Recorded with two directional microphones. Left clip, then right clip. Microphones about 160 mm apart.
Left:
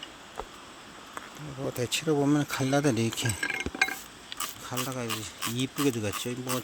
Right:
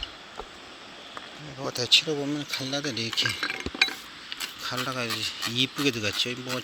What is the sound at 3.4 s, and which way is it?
Chink, 35° right (ahead or behind).